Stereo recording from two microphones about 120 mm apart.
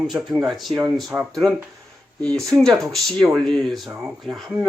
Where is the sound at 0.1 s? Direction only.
Centre (ahead or behind).